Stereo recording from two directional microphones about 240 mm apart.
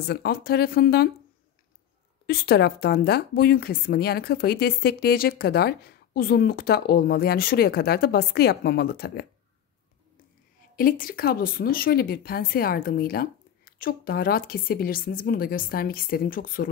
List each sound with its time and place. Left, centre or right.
0.0 s a woman's voice: left
2.2 s a woman's voice: left
10.8 s a woman's voice: left